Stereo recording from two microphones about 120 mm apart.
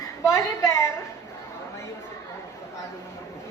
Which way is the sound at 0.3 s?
25° left (ahead or behind).